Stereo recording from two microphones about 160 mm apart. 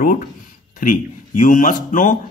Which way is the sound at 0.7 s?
55° left (ahead or behind).